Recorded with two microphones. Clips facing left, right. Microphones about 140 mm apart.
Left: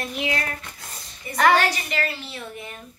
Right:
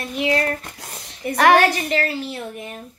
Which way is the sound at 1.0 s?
75° right (ahead or behind).